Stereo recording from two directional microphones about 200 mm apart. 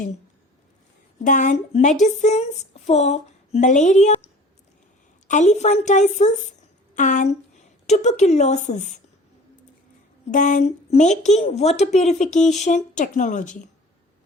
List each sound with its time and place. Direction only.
1.2 s a woman's voice: 40° left (ahead or behind)
5.3 s a woman's voice: 35° left (ahead or behind)
10.3 s a woman's voice: 35° left (ahead or behind)